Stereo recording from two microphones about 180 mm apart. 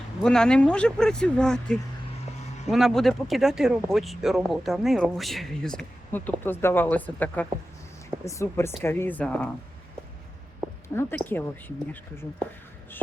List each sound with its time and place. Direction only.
0.2 s speech: 5° left (ahead or behind)
10.8 s speech: 15° left (ahead or behind)